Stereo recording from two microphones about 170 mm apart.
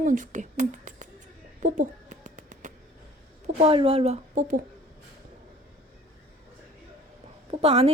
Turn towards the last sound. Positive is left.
turn(degrees=-35)  # may be behind; listen again after turning